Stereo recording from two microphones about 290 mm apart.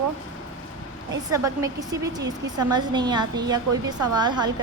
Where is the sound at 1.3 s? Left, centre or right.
Centre.